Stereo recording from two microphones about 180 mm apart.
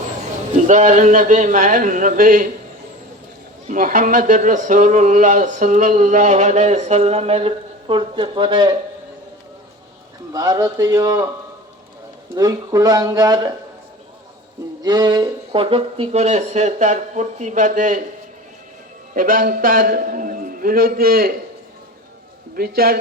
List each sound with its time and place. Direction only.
0.5 s speech: 40° right (ahead or behind)
3.7 s speech: 50° right (ahead or behind); by 8.7 s 25° right (ahead or behind)
10.3 s speech: 20° right (ahead or behind)
12.4 s speech: 20° right (ahead or behind)
14.8 s speech: 25° right (ahead or behind); by 18.0 s 45° right (ahead or behind)
19.1 s speech: 50° right (ahead or behind)
22.5 s a man's voice: 55° right (ahead or behind)